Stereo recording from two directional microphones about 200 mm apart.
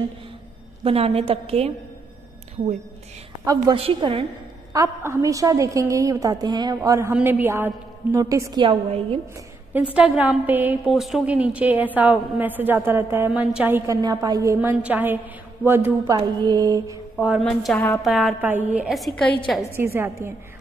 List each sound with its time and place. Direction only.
0.8 s a woman's voice: 30° right (ahead or behind)
3.4 s a woman's voice: 25° right (ahead or behind)
4.7 s a woman's voice: 15° right (ahead or behind)
9.8 s a woman's voice: 5° right (ahead or behind)
17.4 s a woman's voice: 5° left (ahead or behind)
19.7 s a woman's voice: 10° right (ahead or behind)